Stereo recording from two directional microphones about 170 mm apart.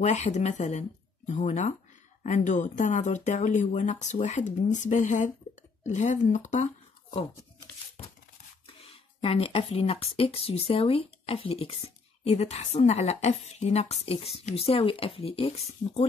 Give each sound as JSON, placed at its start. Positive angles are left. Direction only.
{"t": 0.0, "sound": "speech", "side_deg": 45}
{"t": 9.2, "sound": "speech", "side_deg": 35}